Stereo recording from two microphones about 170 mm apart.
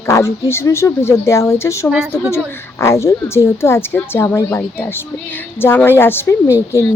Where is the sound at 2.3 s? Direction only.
15° left (ahead or behind).